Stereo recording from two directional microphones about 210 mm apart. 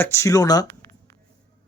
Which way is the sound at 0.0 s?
10° left (ahead or behind).